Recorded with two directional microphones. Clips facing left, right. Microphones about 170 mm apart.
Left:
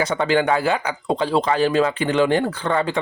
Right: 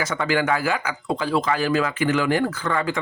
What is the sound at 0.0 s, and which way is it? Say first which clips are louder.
Speech: left 4 dB; 30° left (ahead or behind).